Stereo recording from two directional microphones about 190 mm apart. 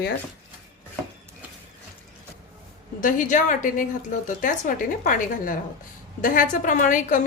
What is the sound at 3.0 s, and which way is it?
A woman's voice, 45° left (ahead or behind).